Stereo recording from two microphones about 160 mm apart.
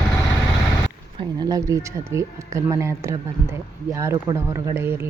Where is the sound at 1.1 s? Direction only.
30° right (ahead or behind).